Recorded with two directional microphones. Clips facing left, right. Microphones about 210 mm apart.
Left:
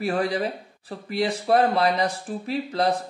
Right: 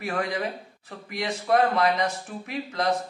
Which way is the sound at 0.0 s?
35° left (ahead or behind).